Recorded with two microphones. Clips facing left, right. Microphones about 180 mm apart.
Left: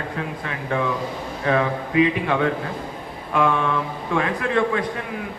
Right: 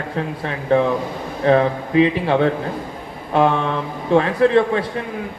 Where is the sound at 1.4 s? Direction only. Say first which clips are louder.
Right 6 dB; 30° right (ahead or behind).